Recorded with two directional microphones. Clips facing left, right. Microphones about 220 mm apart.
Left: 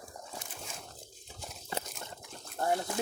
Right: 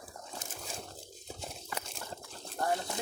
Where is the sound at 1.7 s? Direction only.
25° left (ahead or behind).